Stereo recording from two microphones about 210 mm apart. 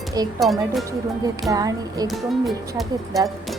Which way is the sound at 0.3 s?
Centre (ahead or behind).